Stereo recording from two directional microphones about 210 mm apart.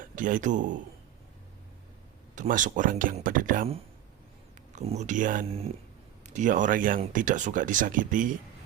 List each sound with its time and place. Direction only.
0.0 s a man's voice: 40° right (ahead or behind)
2.3 s speech: 35° right (ahead or behind)
5.5 s speech: 30° right (ahead or behind)